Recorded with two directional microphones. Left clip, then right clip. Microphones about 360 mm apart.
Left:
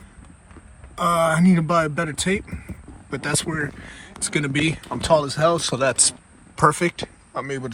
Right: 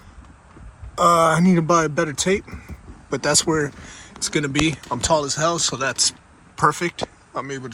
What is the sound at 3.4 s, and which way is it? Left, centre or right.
Speech, centre.